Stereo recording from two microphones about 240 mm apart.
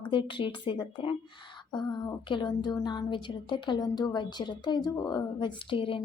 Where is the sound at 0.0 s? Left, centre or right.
Left.